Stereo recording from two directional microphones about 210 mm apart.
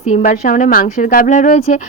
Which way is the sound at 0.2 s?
45° left (ahead or behind).